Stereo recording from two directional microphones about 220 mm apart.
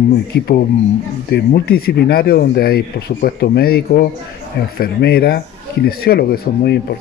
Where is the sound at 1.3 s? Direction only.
45° left (ahead or behind).